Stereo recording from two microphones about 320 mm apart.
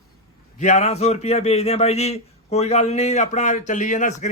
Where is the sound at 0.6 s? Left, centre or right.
Left.